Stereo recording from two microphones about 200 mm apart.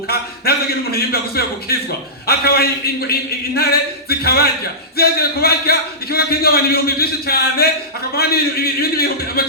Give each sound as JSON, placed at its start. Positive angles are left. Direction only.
{"t": 0.1, "sound": "a man's voice", "side_deg": 50}